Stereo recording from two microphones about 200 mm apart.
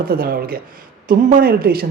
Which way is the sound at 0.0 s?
45° right (ahead or behind).